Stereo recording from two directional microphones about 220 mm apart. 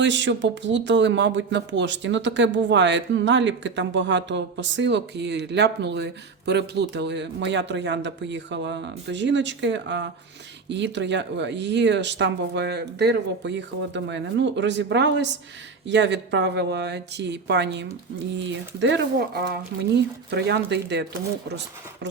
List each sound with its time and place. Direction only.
0.0 s speech: 55° right (ahead or behind)